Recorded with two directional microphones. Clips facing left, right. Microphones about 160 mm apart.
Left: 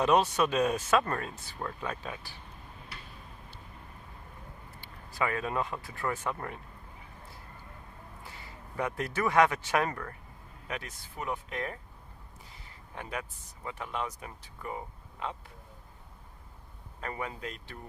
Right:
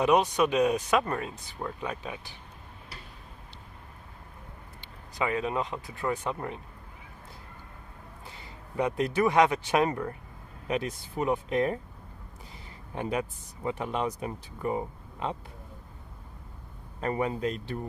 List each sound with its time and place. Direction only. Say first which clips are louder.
0.0 s speech: right 2 dB; 15° right (ahead or behind)
4.8 s speech: right 1 dB; 20° right (ahead or behind)
8.3 s speech: right 2 dB; 20° right (ahead or behind)
13.0 s speech: right 8 dB; 25° right (ahead or behind)
17.0 s speech: right 9 dB; 30° right (ahead or behind)